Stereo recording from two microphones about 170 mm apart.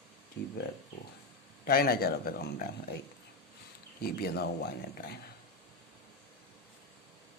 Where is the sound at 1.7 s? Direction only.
60° left (ahead or behind).